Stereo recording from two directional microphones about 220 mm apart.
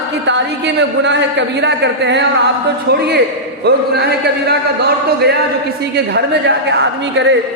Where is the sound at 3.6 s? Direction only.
50° right (ahead or behind).